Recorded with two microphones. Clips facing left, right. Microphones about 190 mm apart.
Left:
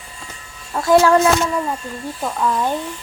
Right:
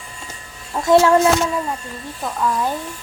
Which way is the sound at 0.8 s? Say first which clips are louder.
Even; 20° right (ahead or behind).